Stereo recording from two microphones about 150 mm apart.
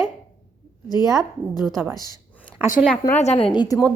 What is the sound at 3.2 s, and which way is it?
Speech, 45° left (ahead or behind).